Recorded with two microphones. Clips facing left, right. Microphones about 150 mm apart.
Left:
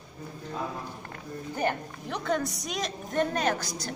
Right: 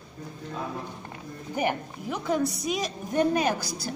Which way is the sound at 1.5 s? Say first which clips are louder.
Right 2 dB; 10° right (ahead or behind).